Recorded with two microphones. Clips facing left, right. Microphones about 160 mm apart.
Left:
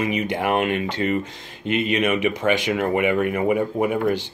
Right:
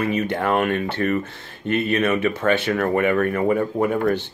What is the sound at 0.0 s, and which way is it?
Speech, 15° left (ahead or behind).